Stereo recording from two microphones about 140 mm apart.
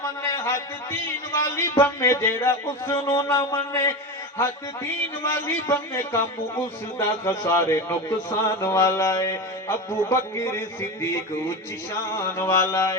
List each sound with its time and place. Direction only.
0.0 s speech: 20° left (ahead or behind)
7.3 s speech: 20° left (ahead or behind)